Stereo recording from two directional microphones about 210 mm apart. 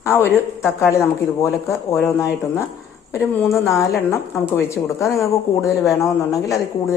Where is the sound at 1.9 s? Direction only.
10° left (ahead or behind).